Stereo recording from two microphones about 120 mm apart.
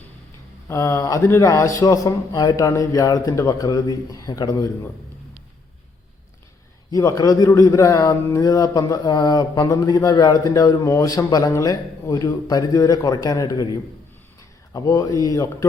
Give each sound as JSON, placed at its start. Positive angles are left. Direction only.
{"t": 0.7, "sound": "a man's voice", "side_deg": 25}
{"t": 6.9, "sound": "a man's voice", "side_deg": 30}
{"t": 14.7, "sound": "a man's voice", "side_deg": 30}